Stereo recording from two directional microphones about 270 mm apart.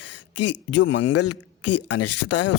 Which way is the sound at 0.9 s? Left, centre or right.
Left.